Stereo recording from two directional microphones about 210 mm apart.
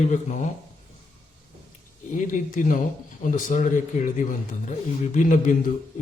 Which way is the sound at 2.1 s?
40° left (ahead or behind).